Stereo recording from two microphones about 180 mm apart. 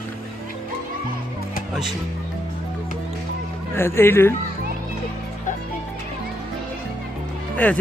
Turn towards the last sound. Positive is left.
turn(degrees=10)  # may be behind; listen again after turning